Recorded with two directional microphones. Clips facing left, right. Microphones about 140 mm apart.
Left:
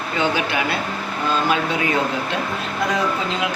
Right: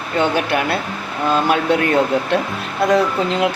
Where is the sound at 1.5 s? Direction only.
60° right (ahead or behind).